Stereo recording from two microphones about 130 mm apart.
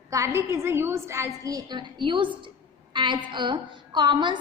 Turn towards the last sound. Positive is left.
turn(degrees=-35)  # may be behind; listen again after turning